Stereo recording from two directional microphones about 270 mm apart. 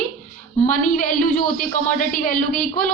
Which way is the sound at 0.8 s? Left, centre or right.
Left.